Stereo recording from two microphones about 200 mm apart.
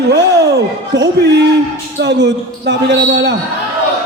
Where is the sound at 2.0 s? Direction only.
60° right (ahead or behind).